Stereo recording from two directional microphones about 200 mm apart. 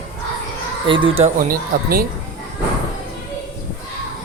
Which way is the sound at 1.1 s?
40° right (ahead or behind).